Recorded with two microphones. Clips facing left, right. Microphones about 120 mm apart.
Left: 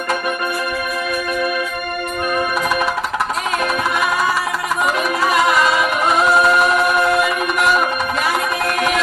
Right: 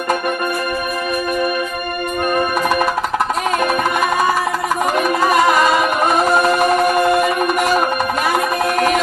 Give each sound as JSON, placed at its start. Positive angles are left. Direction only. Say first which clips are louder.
{"t": 4.8, "sound": "music", "louder": "right 2 dB", "side_deg": -45}